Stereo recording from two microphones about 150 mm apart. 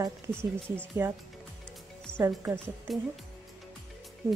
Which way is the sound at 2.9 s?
Centre (ahead or behind).